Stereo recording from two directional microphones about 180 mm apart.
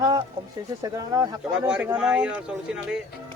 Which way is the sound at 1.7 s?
5° right (ahead or behind).